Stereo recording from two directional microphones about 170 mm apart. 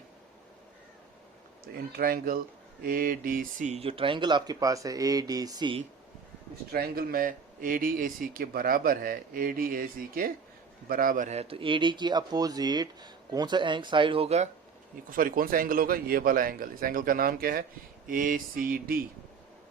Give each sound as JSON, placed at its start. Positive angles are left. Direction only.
{"t": 2.0, "sound": "a man's voice", "side_deg": -60}
{"t": 6.7, "sound": "a man's voice", "side_deg": -65}
{"t": 15.1, "sound": "speech", "side_deg": -55}